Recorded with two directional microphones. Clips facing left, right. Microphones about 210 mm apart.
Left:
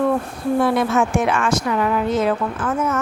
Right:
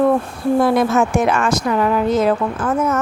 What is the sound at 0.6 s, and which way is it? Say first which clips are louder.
Speech: right 2 dB; 40° right (ahead or behind).